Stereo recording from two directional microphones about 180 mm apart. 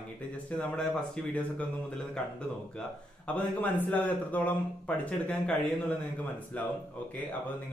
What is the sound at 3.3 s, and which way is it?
A man's voice, 10° left (ahead or behind).